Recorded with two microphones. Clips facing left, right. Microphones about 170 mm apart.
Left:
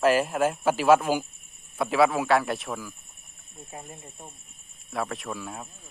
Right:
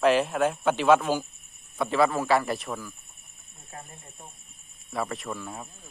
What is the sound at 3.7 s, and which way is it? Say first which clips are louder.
Speech: left 2 dB; 20° left (ahead or behind).